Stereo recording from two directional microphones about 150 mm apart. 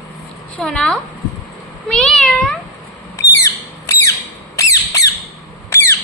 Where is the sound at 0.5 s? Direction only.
5° left (ahead or behind).